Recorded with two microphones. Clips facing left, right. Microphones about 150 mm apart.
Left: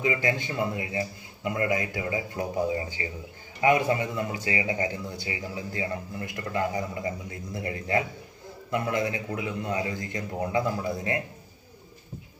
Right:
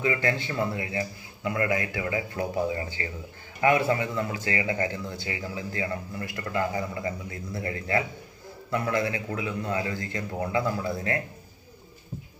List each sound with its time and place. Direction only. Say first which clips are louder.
0.0 s a man's voice: even; 15° left (ahead or behind)